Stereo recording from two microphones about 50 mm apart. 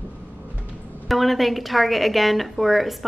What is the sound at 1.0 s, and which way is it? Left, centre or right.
A woman's voice, centre.